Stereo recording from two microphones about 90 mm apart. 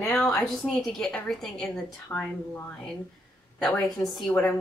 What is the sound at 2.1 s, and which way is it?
Speech, 20° left (ahead or behind).